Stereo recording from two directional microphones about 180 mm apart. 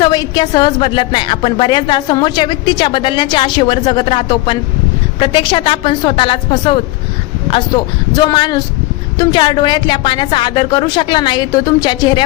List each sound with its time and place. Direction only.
0.0 s a woman's voice: 25° left (ahead or behind)